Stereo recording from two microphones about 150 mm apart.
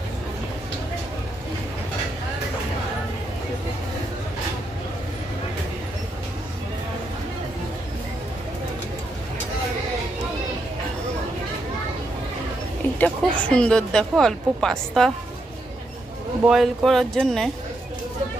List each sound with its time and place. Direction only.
13.0 s speech: 10° left (ahead or behind)
16.4 s speech: centre (ahead or behind)